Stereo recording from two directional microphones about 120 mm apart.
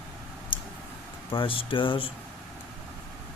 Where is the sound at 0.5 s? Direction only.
40° left (ahead or behind).